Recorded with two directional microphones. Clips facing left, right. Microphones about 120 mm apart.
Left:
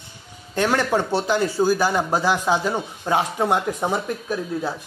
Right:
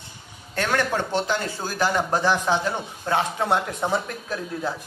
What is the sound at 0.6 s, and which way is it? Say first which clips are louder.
Speech: left 4 dB; 15° left (ahead or behind).